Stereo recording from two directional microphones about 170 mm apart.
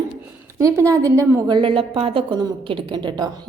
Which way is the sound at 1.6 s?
30° right (ahead or behind).